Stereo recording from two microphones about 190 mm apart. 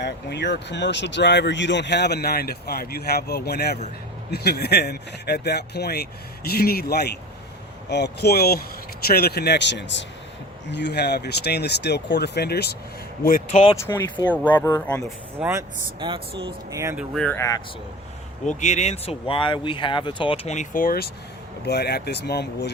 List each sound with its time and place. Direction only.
0.0 s speech: 65° left (ahead or behind)
13.2 s speech: 45° left (ahead or behind)
13.7 s speech: 15° left (ahead or behind)
15.4 s speech: 10° right (ahead or behind)
16.0 s speech: 25° right (ahead or behind)
16.7 s speech: 15° right (ahead or behind)
17.0 s speech: 5° left (ahead or behind)
17.3 s speech: 15° left (ahead or behind)
18.4 s speech: 40° left (ahead or behind); by 22.7 s 60° left (ahead or behind)